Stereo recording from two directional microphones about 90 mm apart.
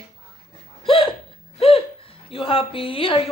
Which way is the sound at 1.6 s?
90° left.